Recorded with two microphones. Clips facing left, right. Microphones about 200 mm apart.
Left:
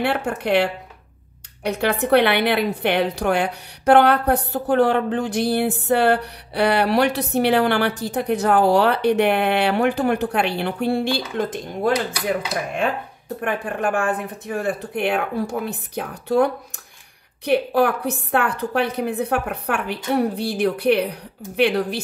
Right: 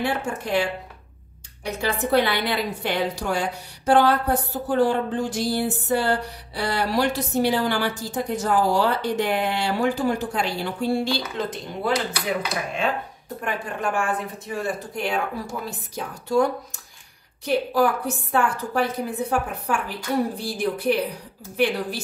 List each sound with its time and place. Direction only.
0.0 s a woman's voice: 65° left (ahead or behind)
13.4 s a woman's voice: 60° left (ahead or behind)
17.5 s a woman's voice: 60° left (ahead or behind)